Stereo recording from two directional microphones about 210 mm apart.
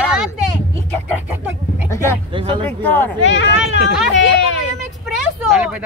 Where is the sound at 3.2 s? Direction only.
60° left (ahead or behind).